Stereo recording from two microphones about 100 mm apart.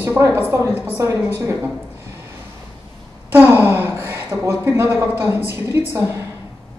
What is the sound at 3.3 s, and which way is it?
Speech, 20° right (ahead or behind).